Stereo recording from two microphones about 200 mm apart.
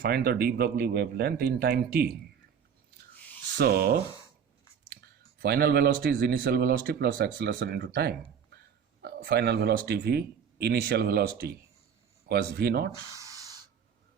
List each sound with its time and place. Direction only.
0.0 s a man's voice: 50° right (ahead or behind)
3.6 s a man's voice: 50° right (ahead or behind)
5.4 s a man's voice: 50° right (ahead or behind)